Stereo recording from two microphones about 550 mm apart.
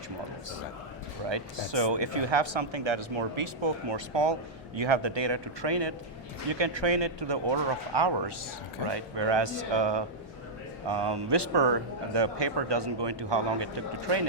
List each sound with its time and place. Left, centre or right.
1.3 s speech: right